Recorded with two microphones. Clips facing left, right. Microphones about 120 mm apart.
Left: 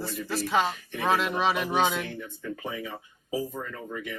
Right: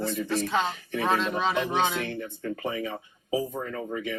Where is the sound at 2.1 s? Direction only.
65° right (ahead or behind).